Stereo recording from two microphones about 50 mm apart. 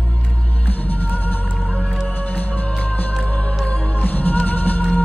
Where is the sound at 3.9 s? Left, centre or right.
Left.